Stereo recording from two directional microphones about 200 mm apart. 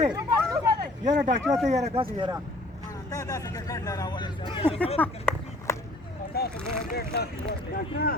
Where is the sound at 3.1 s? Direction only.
15° left (ahead or behind).